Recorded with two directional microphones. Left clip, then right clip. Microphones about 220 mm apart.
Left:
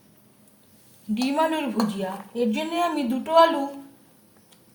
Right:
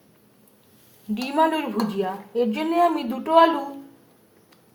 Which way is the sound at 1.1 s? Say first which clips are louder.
Right 2 dB; 5° right (ahead or behind).